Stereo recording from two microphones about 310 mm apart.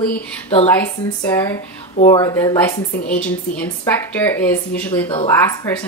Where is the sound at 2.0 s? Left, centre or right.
Centre.